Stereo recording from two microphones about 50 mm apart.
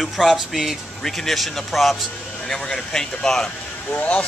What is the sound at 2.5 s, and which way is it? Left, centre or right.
Speech, centre.